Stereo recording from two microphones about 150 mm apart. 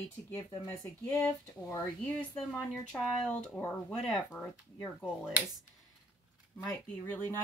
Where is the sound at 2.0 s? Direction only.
5° left (ahead or behind).